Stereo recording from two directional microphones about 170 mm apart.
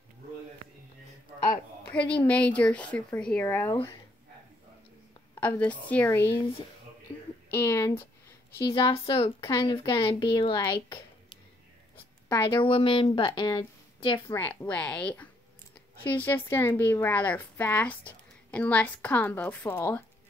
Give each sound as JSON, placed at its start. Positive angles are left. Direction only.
{"t": 1.9, "sound": "a woman's voice", "side_deg": 5}
{"t": 5.3, "sound": "a woman's voice", "side_deg": 10}
{"t": 7.1, "sound": "a sound", "side_deg": 10}
{"t": 7.5, "sound": "a woman's voice", "side_deg": 15}
{"t": 8.7, "sound": "a woman's voice", "side_deg": 30}
{"t": 12.6, "sound": "a woman's voice", "side_deg": 30}
{"t": 14.3, "sound": "a woman's voice", "side_deg": 10}